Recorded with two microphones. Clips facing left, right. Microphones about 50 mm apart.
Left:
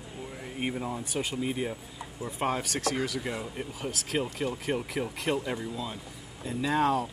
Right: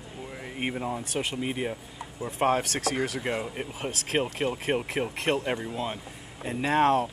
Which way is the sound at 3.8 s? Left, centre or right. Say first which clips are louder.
Right 3 dB; right.